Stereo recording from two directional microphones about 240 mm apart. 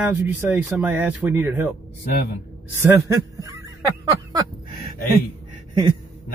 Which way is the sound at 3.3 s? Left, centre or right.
Centre.